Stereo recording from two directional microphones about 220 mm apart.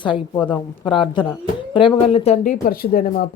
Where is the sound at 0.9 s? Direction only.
20° left (ahead or behind).